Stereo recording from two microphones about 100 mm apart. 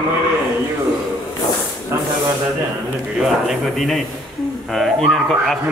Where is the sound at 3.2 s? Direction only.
Centre (ahead or behind).